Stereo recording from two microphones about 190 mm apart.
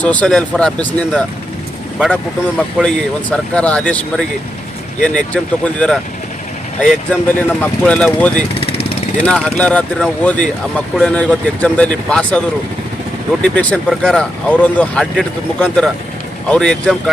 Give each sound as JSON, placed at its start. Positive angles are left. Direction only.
{"t": 0.0, "sound": "speech", "side_deg": 5}
{"t": 2.7, "sound": "speech", "side_deg": 5}
{"t": 7.1, "sound": "speech", "side_deg": 10}
{"t": 13.4, "sound": "speech", "side_deg": 5}